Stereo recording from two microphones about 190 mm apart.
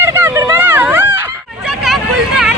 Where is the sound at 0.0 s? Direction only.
15° right (ahead or behind).